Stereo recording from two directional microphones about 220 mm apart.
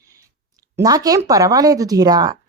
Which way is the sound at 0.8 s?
15° right (ahead or behind).